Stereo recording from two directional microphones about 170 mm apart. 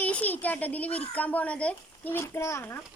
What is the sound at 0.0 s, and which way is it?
Speech, 10° left (ahead or behind).